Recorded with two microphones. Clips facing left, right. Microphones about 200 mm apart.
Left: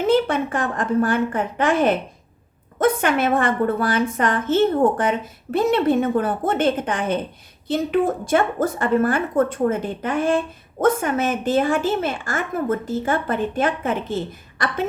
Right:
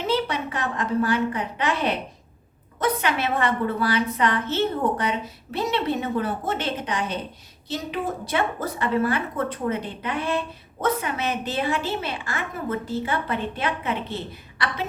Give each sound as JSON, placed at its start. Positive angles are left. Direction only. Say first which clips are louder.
{"t": 0.0, "sound": "a woman's voice", "louder": "left 7 dB", "side_deg": 50}